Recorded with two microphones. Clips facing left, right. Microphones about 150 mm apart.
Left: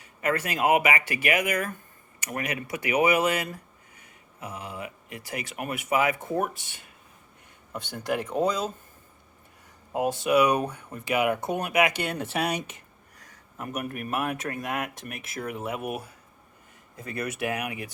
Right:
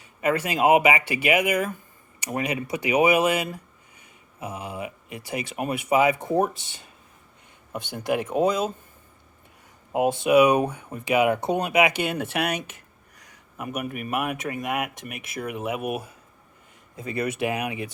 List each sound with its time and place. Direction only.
0.2 s speech: 20° right (ahead or behind)
9.9 s speech: 20° right (ahead or behind)
12.1 s speech: 5° right (ahead or behind); by 17.9 s 20° right (ahead or behind)